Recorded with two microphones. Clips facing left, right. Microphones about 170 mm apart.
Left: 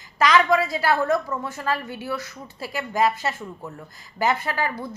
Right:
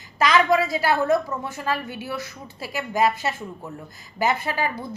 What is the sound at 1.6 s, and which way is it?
A woman's voice, 15° right (ahead or behind).